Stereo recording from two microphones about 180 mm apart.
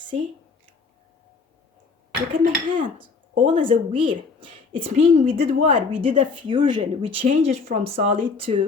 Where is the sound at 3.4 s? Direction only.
30° right (ahead or behind).